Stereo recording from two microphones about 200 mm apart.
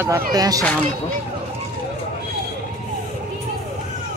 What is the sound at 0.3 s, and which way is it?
Speech, 20° right (ahead or behind).